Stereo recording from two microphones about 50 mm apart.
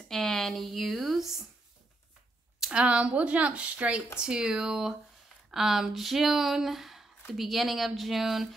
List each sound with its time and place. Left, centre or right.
0.1 s speech: centre
2.6 s speech: right
4.2 s speech: centre